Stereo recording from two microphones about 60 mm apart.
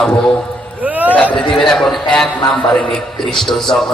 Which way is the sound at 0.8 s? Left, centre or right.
Right.